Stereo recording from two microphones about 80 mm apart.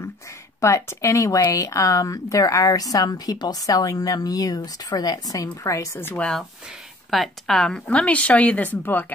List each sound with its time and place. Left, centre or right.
0.6 s a woman's voice: left
6.1 s speech: centre